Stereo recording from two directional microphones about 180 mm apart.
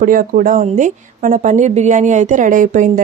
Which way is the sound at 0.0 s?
50° right (ahead or behind).